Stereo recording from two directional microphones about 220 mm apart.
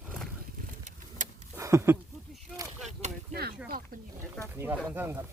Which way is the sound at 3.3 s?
45° right (ahead or behind).